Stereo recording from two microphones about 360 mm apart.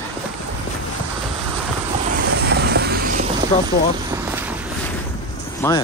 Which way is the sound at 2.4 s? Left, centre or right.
Right.